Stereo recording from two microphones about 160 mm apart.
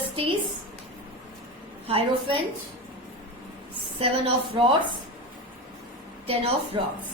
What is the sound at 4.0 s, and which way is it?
Speech, 35° right (ahead or behind).